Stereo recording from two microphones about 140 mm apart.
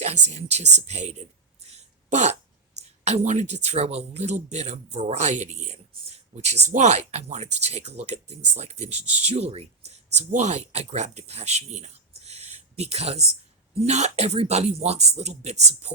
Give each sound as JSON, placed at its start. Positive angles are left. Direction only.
{"t": 0.0, "sound": "speech", "side_deg": -55}
{"t": 1.6, "sound": "a sound", "side_deg": -55}
{"t": 3.0, "sound": "speech", "side_deg": -50}